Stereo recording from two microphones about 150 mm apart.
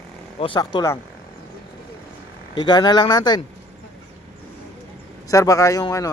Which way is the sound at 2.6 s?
30° left (ahead or behind).